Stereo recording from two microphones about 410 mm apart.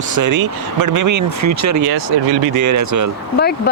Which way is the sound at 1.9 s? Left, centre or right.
Right.